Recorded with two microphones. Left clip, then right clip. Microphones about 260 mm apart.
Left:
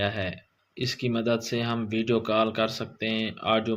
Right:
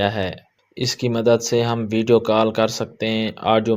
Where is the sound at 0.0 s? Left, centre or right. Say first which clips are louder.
Right 7 dB; right.